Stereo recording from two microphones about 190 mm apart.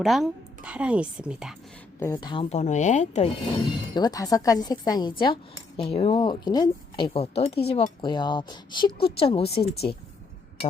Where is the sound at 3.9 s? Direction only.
20° left (ahead or behind).